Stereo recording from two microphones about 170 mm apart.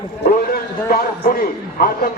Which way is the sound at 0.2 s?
65° left (ahead or behind).